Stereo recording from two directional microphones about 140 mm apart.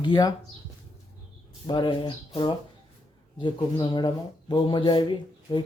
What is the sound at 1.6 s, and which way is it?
Speech, 35° left (ahead or behind).